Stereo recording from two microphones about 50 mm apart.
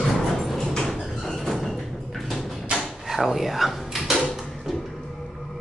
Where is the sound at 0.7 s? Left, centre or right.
Centre.